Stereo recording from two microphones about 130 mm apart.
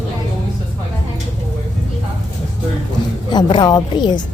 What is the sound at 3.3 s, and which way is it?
Speech, 35° left (ahead or behind).